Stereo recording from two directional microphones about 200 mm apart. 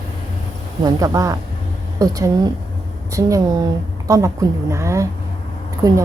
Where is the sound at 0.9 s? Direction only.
15° right (ahead or behind).